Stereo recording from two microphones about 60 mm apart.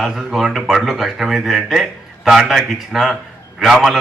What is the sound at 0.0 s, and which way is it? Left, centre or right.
A man's voice, centre.